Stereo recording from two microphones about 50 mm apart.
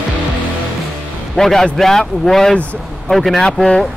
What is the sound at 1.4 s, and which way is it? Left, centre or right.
A man's voice, centre.